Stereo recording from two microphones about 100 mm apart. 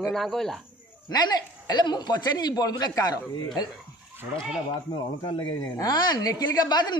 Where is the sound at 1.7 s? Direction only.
45° left (ahead or behind).